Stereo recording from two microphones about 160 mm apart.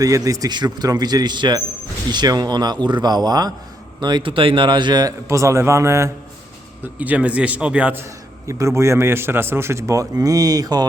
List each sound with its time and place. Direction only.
0.0 s a man's voice: 20° right (ahead or behind)